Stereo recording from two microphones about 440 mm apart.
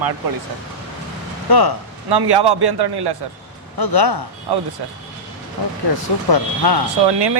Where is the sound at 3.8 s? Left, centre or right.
Left.